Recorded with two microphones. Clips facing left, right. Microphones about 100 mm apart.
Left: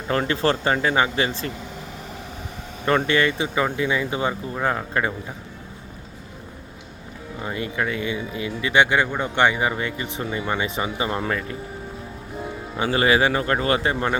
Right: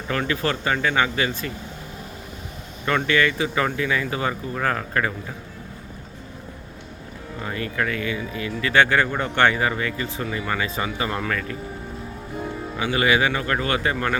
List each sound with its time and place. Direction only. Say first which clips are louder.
0.1 s speech: left 3 dB; 30° left (ahead or behind)
2.8 s speech: left 1 dB; 30° left (ahead or behind)
7.4 s speech: even; 20° left (ahead or behind)
12.8 s speech: left 2 dB; 30° left (ahead or behind)